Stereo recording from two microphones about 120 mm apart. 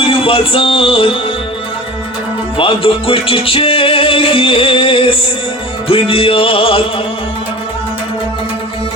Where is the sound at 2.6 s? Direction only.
50° left (ahead or behind).